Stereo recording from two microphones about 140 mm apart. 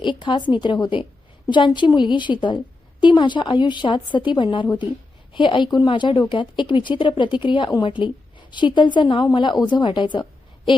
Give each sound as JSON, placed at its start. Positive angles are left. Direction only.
{"t": 0.0, "sound": "a woman's voice", "side_deg": 35}